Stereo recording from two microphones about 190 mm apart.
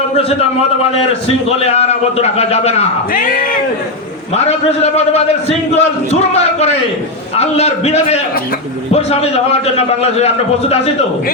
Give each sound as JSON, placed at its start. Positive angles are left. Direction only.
{"t": 1.5, "sound": "a man's voice", "side_deg": 35}
{"t": 3.1, "sound": "speech", "side_deg": 45}
{"t": 4.4, "sound": "a man's voice", "side_deg": 35}
{"t": 7.3, "sound": "a man's voice", "side_deg": 35}